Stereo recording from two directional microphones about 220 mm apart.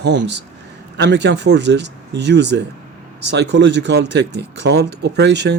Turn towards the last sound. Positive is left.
turn(degrees=-50)  # may be behind; listen again after turning